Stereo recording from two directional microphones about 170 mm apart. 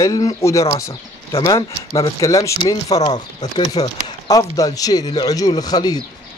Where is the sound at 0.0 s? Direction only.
20° left (ahead or behind).